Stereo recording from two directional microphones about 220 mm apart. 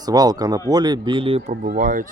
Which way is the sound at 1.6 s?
35° right (ahead or behind).